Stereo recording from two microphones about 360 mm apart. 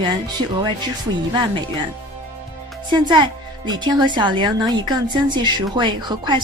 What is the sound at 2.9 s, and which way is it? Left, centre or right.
A woman's voice, centre.